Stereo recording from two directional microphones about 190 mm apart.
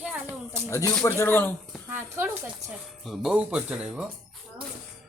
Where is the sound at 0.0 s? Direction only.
10° right (ahead or behind).